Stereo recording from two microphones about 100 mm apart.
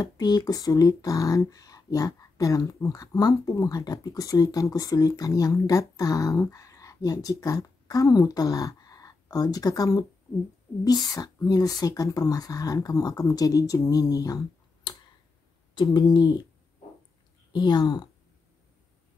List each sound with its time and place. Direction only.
0.0 s speech: 45° left (ahead or behind)
17.5 s speech: 50° left (ahead or behind)